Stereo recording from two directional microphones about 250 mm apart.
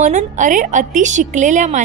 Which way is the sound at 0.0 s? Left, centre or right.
Right.